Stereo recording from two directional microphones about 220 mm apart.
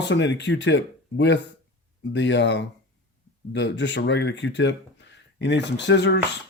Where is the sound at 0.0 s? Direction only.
50° left (ahead or behind).